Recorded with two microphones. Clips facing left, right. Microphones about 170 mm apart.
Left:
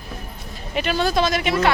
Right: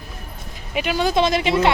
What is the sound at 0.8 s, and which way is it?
Speech, 10° right (ahead or behind).